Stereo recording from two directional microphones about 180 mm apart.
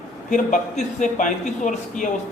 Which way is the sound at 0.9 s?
45° left (ahead or behind).